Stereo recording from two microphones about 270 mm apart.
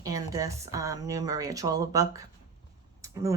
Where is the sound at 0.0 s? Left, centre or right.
Centre.